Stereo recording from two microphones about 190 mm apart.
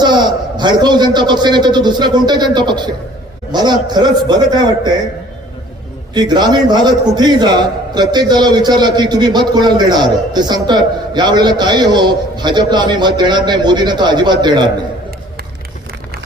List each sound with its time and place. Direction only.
0.0 s a man's voice: 25° right (ahead or behind)
6.1 s a man's voice: 25° right (ahead or behind)